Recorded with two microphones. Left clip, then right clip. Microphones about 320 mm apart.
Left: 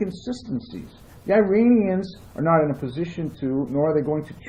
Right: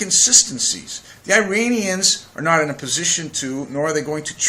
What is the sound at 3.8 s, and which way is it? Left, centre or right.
Speech, centre.